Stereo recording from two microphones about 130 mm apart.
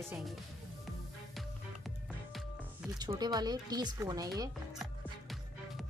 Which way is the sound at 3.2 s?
30° right (ahead or behind).